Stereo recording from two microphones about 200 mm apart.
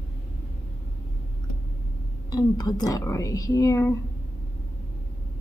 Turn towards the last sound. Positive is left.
turn(degrees=15)  # may be behind; listen again after turning